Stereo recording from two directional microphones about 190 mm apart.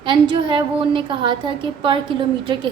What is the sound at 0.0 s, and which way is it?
A woman's voice, 25° right (ahead or behind).